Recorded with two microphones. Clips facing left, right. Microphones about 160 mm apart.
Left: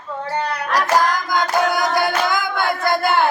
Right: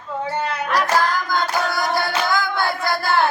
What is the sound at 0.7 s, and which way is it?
Music, 15° left (ahead or behind).